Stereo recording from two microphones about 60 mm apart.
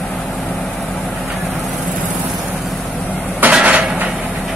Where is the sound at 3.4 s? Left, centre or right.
Right.